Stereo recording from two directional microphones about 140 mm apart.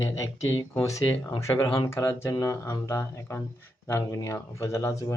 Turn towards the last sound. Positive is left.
turn(degrees=20)  # may be behind; listen again after turning